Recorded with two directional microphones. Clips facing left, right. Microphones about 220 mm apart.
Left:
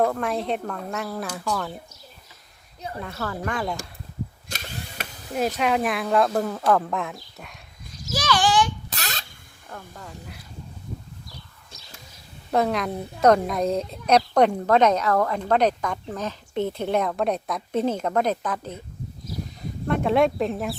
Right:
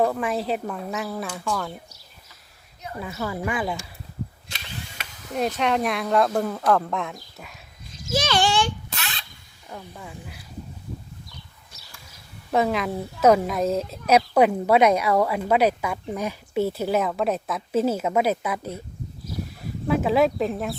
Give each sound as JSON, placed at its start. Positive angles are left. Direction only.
{"t": 0.0, "sound": "speech", "side_deg": -5}
{"t": 3.0, "sound": "speech", "side_deg": -5}
{"t": 4.4, "sound": "a sound", "side_deg": 45}
{"t": 5.3, "sound": "speech", "side_deg": 5}
{"t": 8.1, "sound": "a sound", "side_deg": -25}
{"t": 9.0, "sound": "rodents", "side_deg": 40}
{"t": 9.6, "sound": "speech", "side_deg": -15}
{"t": 12.5, "sound": "speech", "side_deg": 0}
{"t": 19.9, "sound": "speech", "side_deg": -5}